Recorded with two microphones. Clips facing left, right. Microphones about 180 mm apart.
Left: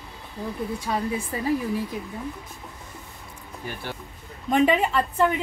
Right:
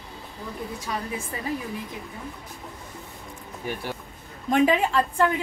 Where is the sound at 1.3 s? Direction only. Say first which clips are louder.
Left 4 dB; 30° left (ahead or behind).